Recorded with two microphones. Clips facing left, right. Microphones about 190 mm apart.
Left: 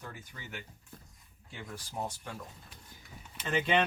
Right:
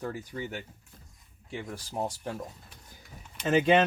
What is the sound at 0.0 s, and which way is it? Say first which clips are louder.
Speech: right 12 dB; 35° right (ahead or behind).